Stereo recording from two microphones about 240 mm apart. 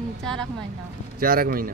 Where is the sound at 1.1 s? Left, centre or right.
Right.